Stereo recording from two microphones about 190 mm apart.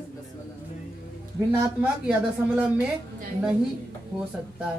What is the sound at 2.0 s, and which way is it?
Speech, 5° right (ahead or behind).